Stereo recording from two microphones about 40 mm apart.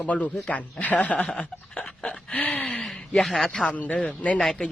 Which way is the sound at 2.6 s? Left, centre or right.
Left.